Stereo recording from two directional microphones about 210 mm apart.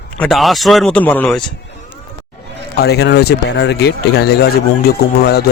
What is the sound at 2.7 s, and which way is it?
Speech, 50° left (ahead or behind).